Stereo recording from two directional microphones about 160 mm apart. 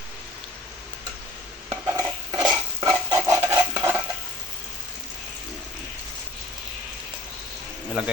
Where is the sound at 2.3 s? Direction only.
25° right (ahead or behind).